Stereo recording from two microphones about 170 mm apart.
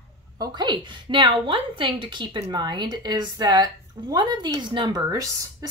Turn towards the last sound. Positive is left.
turn(degrees=-20)  # may be behind; listen again after turning